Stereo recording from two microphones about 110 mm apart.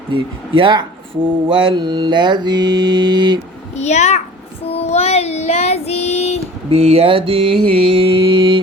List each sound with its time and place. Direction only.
0.1 s speech: 50° right (ahead or behind)
3.8 s a child's voice: 90° left
4.6 s child singing: 70° left (ahead or behind)
6.7 s mantra: 70° right (ahead or behind)